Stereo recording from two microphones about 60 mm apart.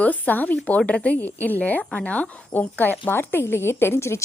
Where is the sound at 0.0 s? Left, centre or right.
Left.